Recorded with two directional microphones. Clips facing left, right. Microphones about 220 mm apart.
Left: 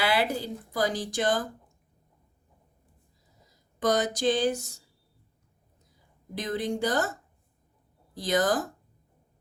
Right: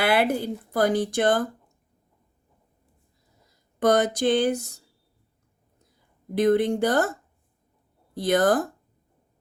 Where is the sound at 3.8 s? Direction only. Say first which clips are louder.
Right 5 dB; 60° right (ahead or behind).